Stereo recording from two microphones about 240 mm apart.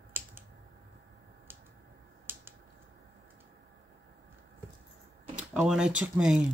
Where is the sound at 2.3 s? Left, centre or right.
Centre.